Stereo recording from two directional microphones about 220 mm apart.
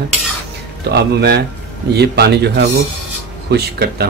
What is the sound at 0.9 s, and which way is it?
Speech, 45° right (ahead or behind).